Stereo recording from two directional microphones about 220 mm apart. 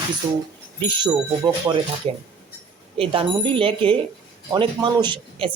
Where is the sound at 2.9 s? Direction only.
25° right (ahead or behind).